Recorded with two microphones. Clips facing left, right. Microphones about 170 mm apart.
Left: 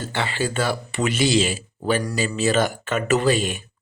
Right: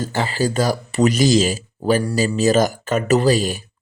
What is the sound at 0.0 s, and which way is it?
Speech, 40° right (ahead or behind).